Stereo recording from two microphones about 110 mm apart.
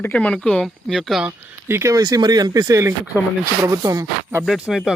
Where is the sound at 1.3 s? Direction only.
25° right (ahead or behind).